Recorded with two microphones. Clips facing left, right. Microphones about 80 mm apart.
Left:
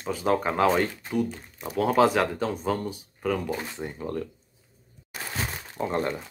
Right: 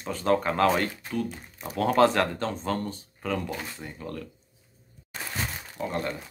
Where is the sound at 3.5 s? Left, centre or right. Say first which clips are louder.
Left 4 dB; left.